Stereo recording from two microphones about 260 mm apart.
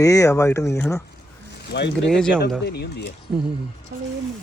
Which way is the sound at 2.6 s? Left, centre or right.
Left.